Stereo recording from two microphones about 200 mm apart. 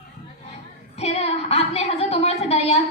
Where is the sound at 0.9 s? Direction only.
30° left (ahead or behind).